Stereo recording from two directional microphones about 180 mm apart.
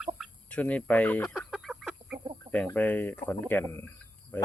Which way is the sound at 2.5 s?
10° left (ahead or behind).